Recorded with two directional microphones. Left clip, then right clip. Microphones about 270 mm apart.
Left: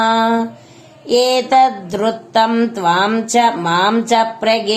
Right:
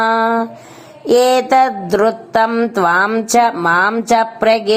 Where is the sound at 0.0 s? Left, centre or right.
Right.